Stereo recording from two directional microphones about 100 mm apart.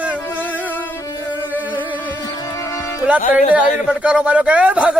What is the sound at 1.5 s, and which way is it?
Music, 15° right (ahead or behind).